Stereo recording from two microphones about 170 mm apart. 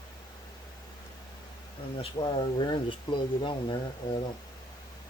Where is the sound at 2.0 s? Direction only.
30° left (ahead or behind).